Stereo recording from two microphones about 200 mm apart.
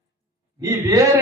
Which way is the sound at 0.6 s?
15° right (ahead or behind).